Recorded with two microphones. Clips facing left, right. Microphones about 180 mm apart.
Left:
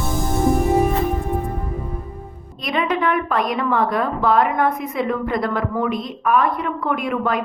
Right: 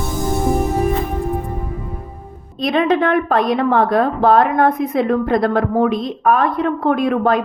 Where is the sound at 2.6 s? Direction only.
30° right (ahead or behind).